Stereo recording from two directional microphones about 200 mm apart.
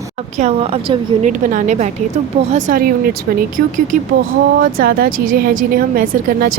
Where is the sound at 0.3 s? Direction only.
30° right (ahead or behind).